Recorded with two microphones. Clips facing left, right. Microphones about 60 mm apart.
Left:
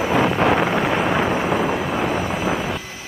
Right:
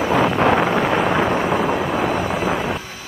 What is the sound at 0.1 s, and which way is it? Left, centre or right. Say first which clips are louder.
Wind noise: right 1 dB; right.